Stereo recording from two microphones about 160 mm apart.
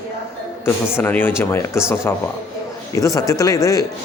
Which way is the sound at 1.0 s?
10° left (ahead or behind).